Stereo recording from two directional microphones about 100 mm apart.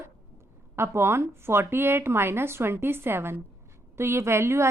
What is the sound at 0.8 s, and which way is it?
A woman's voice, 25° right (ahead or behind).